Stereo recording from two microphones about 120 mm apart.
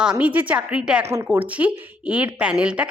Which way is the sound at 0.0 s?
10° right (ahead or behind).